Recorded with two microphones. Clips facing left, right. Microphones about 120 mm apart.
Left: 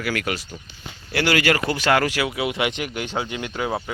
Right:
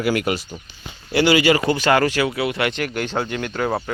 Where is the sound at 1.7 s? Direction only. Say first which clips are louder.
Right 3 dB; centre (ahead or behind).